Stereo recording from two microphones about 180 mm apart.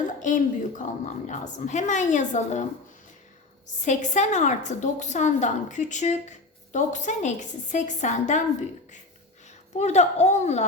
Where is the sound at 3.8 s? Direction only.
40° left (ahead or behind).